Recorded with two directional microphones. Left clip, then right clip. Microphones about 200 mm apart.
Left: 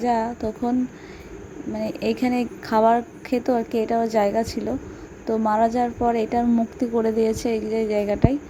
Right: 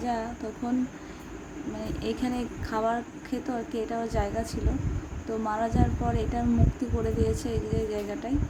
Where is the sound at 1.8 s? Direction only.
30° left (ahead or behind).